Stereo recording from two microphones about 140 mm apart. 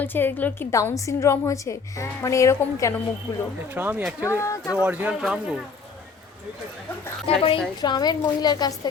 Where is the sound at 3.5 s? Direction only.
15° right (ahead or behind).